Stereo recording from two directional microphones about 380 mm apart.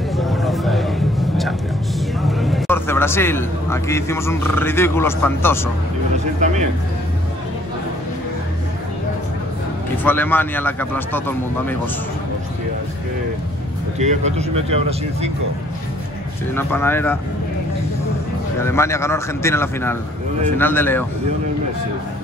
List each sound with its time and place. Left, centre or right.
0.1 s a sound: centre
2.2 s a man's voice: centre
6.1 s a sound: centre
10.0 s a man's voice: centre
13.9 s speech: centre
16.5 s a man's voice: centre
18.6 s a man's voice: centre